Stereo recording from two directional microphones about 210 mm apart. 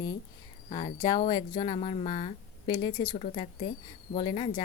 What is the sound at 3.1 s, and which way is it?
A woman's voice, 30° left (ahead or behind).